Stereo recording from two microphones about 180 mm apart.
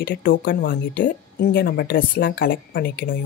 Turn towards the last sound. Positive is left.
turn(degrees=55)  # may be behind; listen again after turning